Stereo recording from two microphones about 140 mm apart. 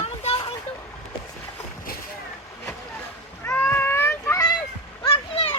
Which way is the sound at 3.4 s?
15° left (ahead or behind).